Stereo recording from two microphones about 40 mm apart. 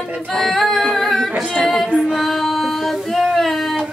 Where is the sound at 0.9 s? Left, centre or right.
Centre.